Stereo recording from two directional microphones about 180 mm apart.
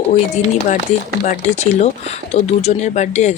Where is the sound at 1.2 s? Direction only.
40° left (ahead or behind).